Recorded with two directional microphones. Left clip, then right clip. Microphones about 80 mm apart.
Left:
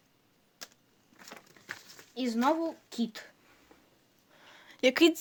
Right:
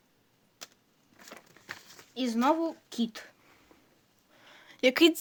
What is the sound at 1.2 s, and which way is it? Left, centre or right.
Biting, centre.